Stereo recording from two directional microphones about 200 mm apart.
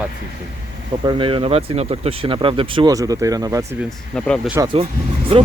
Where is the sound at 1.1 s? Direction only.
25° right (ahead or behind).